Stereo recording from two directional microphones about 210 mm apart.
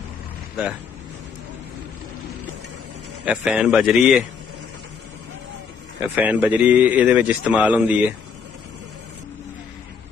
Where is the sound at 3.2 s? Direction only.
5° right (ahead or behind).